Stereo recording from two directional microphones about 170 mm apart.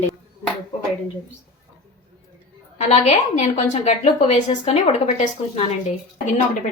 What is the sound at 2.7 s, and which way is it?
A woman's voice, 40° left (ahead or behind).